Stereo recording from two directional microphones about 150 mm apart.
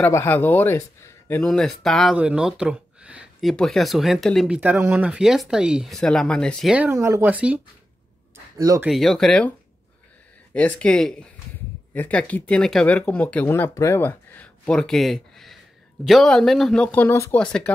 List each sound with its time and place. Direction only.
0.0 s speech: 15° left (ahead or behind)
1.4 s speech: 5° left (ahead or behind)
4.6 s speech: 15° right (ahead or behind); by 6.7 s 5° left (ahead or behind)
6.7 s speech: 15° right (ahead or behind)
8.5 s speech: 25° right (ahead or behind)
8.8 s speech: centre (ahead or behind)
10.5 s speech: 10° left (ahead or behind)